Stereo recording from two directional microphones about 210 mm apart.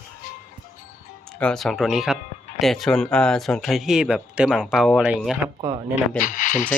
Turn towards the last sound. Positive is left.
turn(degrees=35)  # may be behind; listen again after turning